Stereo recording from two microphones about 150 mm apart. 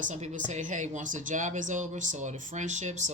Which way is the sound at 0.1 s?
55° right (ahead or behind).